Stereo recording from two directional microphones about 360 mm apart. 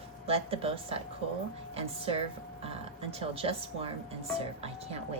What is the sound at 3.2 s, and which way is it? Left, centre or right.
A woman's voice, centre.